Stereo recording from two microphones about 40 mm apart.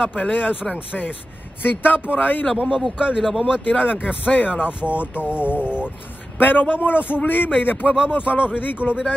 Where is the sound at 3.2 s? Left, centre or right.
Centre.